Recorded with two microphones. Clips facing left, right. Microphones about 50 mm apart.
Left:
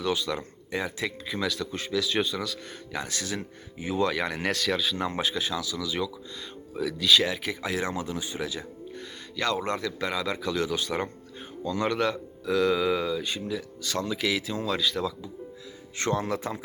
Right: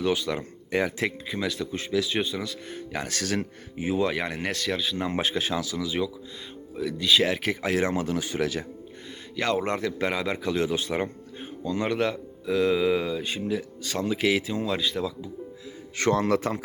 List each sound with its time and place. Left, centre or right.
0.0 s a man's voice: right
0.7 s speech: right
1.4 s speech: centre
2.9 s speech: right
3.9 s speech: centre
4.4 s speech: centre
5.2 s speech: right
6.7 s speech: centre
7.3 s speech: right
8.0 s speech: right
9.3 s a man's voice: right; by 13.1 s centre
13.4 s a man's voice: right
14.4 s speech: centre
16.0 s a man's voice: right